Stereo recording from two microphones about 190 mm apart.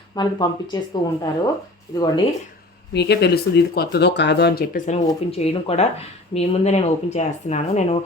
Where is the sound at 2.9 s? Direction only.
60° left (ahead or behind).